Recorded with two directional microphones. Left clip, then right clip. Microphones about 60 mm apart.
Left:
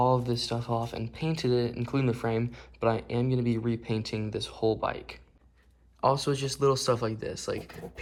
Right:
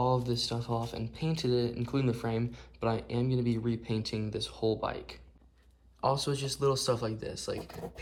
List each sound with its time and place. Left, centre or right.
0.0 s speech: right